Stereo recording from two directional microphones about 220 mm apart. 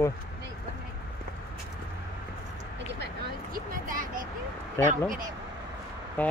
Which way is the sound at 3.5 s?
40° right (ahead or behind).